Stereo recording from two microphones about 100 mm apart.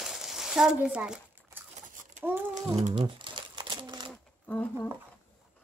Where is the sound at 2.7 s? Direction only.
65° right (ahead or behind); by 4.1 s 45° right (ahead or behind).